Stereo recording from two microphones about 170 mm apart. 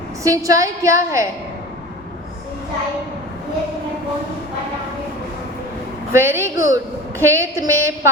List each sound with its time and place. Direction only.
0.2 s a woman's voice: 20° right (ahead or behind)
6.1 s a woman's voice: 15° right (ahead or behind)